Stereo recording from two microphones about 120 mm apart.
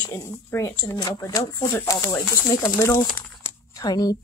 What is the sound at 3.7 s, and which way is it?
Speech, 35° left (ahead or behind).